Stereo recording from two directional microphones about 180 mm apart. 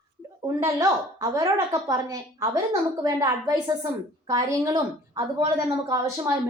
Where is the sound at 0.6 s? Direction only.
20° right (ahead or behind).